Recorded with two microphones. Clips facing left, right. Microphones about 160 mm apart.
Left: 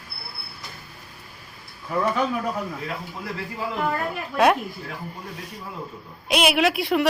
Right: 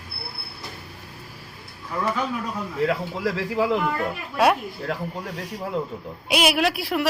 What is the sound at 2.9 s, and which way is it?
Speech, 90° right.